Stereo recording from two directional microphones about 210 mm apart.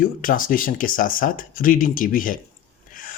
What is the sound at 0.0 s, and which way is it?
Speech, 40° left (ahead or behind).